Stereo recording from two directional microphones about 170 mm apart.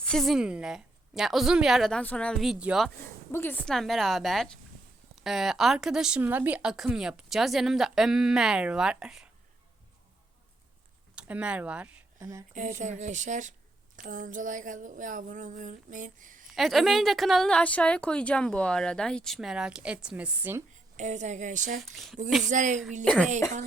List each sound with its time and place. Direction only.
0.0 s a woman's voice: centre (ahead or behind)
3.3 s a woman's voice: 10° left (ahead or behind); by 9.3 s 5° right (ahead or behind)
11.1 s speech: 5° right (ahead or behind)
12.5 s a sound: 45° right (ahead or behind)
16.5 s a woman's voice: centre (ahead or behind)
20.9 s a sound: 45° right (ahead or behind)
21.8 s a woman's voice: centre (ahead or behind)
22.4 s a sound: 45° right (ahead or behind)
23.1 s speech: 5° left (ahead or behind)